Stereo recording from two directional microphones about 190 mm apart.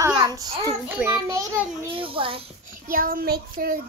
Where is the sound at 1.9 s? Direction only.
30° right (ahead or behind).